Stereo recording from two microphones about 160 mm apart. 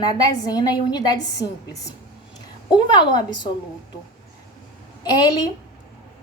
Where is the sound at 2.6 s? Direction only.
30° left (ahead or behind).